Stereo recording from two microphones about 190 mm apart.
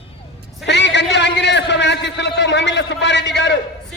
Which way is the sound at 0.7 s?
65° left (ahead or behind).